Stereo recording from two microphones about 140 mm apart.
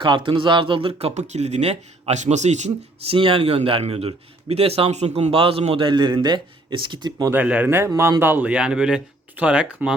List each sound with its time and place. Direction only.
0.0 s speech: 35° right (ahead or behind)
7.3 s speech: 10° right (ahead or behind)